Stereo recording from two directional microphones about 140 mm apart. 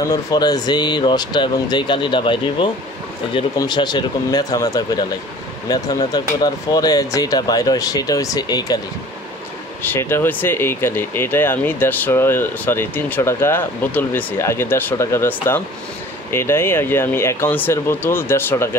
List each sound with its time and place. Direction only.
0.1 s speech: 25° left (ahead or behind)
9.8 s speech: 15° left (ahead or behind)